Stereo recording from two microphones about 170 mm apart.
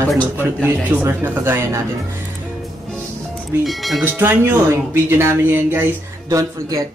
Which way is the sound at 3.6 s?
Centre (ahead or behind).